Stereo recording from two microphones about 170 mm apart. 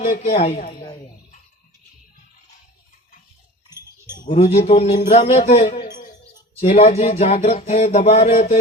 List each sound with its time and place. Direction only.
0.0 s speech: 55° left (ahead or behind)
3.8 s cowbell: 15° right (ahead or behind)
4.5 s a sound: 40° left (ahead or behind)